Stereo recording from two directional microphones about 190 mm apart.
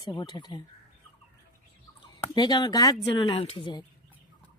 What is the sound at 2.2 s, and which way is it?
Speech, 20° left (ahead or behind).